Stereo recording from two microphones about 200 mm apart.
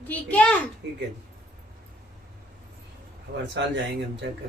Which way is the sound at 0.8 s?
60° right (ahead or behind).